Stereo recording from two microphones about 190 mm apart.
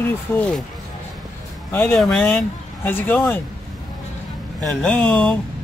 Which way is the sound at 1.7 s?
10° left (ahead or behind).